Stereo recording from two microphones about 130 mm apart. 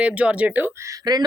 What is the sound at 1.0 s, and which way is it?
Speech, 30° right (ahead or behind).